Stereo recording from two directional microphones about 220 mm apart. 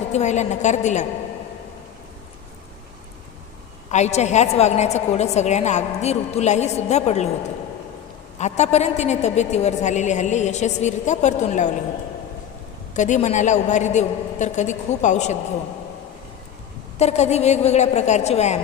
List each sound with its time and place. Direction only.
0.1 s a woman's voice: 30° left (ahead or behind)
3.9 s a woman's voice: 30° left (ahead or behind)
8.4 s a woman's voice: 30° left (ahead or behind)
12.9 s a woman's voice: 35° left (ahead or behind)
17.0 s a woman's voice: 30° left (ahead or behind)